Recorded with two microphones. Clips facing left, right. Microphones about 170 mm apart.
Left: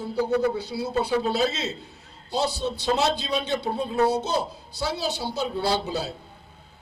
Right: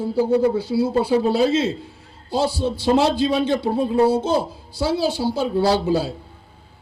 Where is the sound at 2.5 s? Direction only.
90° right.